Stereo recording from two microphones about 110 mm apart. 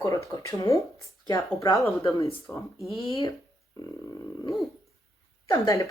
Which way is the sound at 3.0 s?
50° left (ahead or behind).